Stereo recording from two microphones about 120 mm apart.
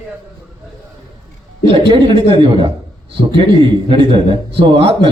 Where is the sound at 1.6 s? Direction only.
45° right (ahead or behind).